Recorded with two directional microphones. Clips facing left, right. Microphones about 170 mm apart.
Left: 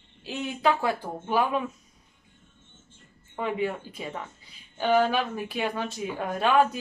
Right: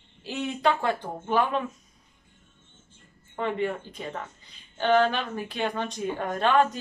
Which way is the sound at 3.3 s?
5° left (ahead or behind).